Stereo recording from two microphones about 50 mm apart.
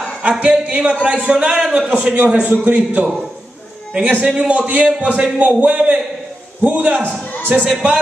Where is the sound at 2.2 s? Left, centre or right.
Right.